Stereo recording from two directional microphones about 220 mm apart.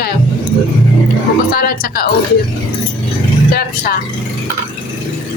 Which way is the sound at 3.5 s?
45° left (ahead or behind).